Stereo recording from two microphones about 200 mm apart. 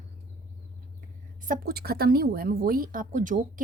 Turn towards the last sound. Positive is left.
turn(degrees=-40)  # may be behind; listen again after turning